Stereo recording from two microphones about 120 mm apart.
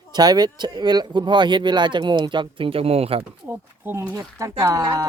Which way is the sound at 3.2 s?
15° right (ahead or behind).